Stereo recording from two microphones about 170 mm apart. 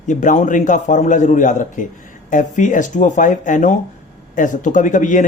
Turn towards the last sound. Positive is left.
turn(degrees=50)  # may be behind; listen again after turning